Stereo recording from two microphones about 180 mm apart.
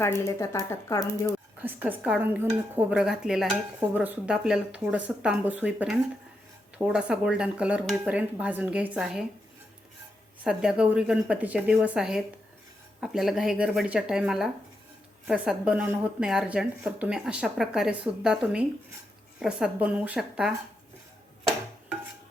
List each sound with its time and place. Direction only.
0.0 s speech: 15° left (ahead or behind)
1.3 s speech: 10° right (ahead or behind)
10.4 s a woman's voice: 5° right (ahead or behind)